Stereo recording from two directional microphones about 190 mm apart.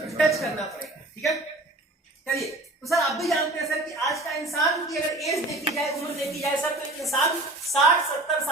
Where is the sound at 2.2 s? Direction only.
Centre (ahead or behind).